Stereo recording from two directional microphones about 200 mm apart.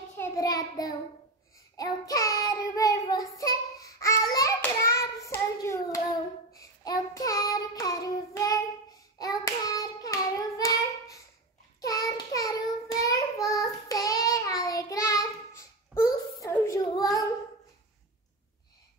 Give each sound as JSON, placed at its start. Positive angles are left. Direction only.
{"t": 0.2, "sound": "child singing", "side_deg": 20}
{"t": 4.9, "sound": "hands", "side_deg": 15}
{"t": 6.5, "sound": "child singing", "side_deg": 20}
{"t": 9.2, "sound": "hands", "side_deg": 15}
{"t": 11.8, "sound": "child singing", "side_deg": 15}